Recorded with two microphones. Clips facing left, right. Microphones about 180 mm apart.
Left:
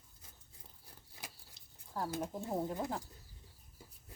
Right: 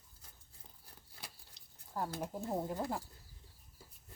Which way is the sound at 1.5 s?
Centre (ahead or behind).